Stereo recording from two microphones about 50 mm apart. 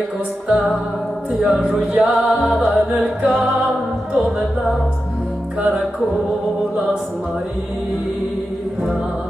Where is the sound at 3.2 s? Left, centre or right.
Right.